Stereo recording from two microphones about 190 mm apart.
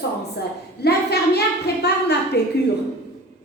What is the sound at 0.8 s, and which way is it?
A woman's voice, 60° left (ahead or behind).